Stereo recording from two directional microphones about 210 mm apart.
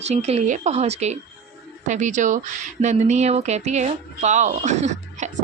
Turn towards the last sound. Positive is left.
turn(degrees=-35)  # may be behind; listen again after turning